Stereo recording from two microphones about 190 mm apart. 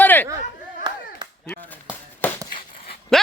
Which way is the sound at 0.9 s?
25° right (ahead or behind).